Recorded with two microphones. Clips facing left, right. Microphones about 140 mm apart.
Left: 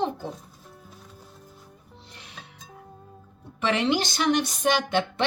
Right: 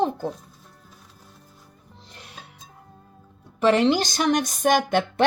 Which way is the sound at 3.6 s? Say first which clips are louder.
Right 5 dB; 40° right (ahead or behind).